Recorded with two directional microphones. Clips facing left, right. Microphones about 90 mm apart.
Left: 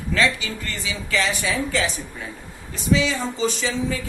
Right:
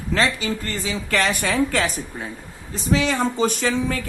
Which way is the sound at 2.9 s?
55° right (ahead or behind).